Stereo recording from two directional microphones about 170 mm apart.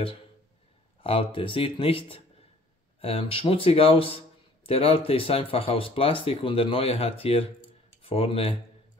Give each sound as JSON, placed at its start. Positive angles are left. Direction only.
{"t": 1.0, "sound": "speech", "side_deg": 30}